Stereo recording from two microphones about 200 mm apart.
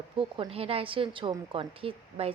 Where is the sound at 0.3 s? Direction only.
30° right (ahead or behind).